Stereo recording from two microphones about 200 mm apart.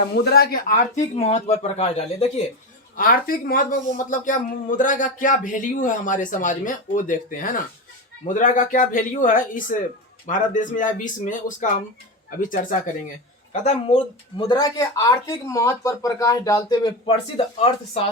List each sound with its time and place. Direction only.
0.3 s speech: 50° left (ahead or behind); by 2.3 s 30° left (ahead or behind)
3.0 s speech: 45° left (ahead or behind); by 18.0 s 30° left (ahead or behind)